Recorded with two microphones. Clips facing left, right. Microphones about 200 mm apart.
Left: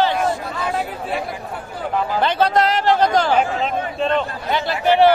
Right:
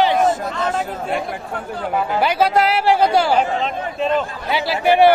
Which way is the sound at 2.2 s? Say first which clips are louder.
Right 1 dB; 10° right (ahead or behind).